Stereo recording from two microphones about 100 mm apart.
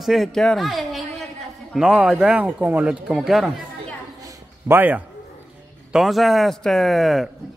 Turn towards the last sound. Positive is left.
turn(degrees=0)  # may be behind; listen again after turning